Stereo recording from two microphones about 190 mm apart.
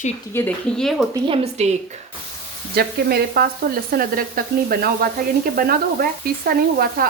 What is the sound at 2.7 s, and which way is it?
Stir, 55° right (ahead or behind).